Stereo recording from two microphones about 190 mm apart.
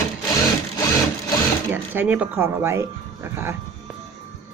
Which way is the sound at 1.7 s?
10° right (ahead or behind).